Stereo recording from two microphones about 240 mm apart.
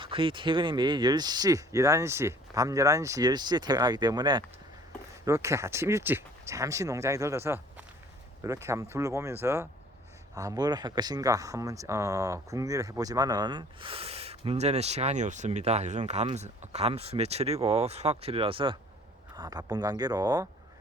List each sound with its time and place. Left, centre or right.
0.0 s speech: right